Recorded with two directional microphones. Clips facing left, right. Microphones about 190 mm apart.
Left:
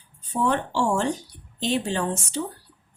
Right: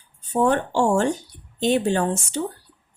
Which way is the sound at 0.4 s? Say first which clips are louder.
Right 4 dB; 50° right (ahead or behind).